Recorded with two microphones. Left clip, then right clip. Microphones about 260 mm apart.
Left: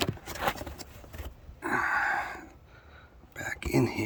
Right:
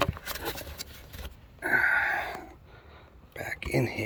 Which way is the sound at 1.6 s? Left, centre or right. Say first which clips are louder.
Right 4 dB; centre.